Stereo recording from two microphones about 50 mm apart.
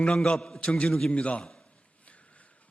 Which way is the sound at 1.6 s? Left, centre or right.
Left.